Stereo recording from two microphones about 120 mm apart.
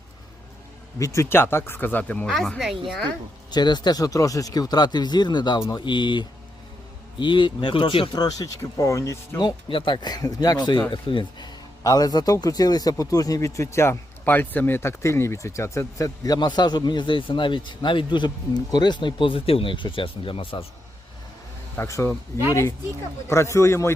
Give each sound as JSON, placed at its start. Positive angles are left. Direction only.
{"t": 0.9, "sound": "speech", "side_deg": 25}
{"t": 2.3, "sound": "speech", "side_deg": 0}
{"t": 3.5, "sound": "a man's voice", "side_deg": 35}
{"t": 9.6, "sound": "a man's voice", "side_deg": 45}
{"t": 21.8, "sound": "speech", "side_deg": 25}
{"t": 23.3, "sound": "speech", "side_deg": 25}